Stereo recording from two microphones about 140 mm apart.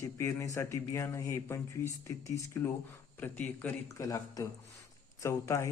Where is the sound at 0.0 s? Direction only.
20° left (ahead or behind).